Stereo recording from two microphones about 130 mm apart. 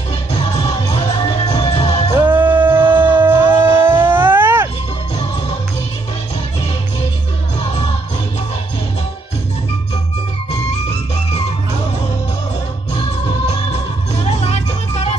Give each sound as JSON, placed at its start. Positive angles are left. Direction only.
{"t": 0.6, "sound": "music", "side_deg": 50}
{"t": 2.3, "sound": "a sound", "side_deg": -15}
{"t": 14.4, "sound": "music", "side_deg": 55}